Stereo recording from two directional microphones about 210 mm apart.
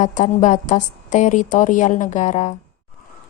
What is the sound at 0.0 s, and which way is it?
A woman's voice, 35° left (ahead or behind).